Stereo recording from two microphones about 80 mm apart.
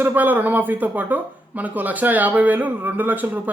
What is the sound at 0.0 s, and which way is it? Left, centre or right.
Speech, right.